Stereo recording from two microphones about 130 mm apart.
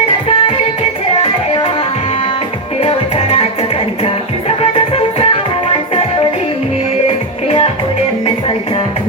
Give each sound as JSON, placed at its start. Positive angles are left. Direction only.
{"t": 0.3, "sound": "music", "side_deg": 45}
{"t": 2.8, "sound": "music", "side_deg": 45}
{"t": 7.4, "sound": "music", "side_deg": 45}